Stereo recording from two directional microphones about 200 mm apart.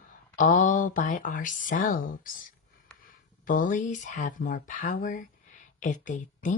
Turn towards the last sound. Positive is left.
turn(degrees=40)  # may be behind; listen again after turning